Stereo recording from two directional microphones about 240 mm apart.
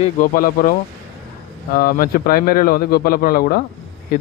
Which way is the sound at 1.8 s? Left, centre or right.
Left.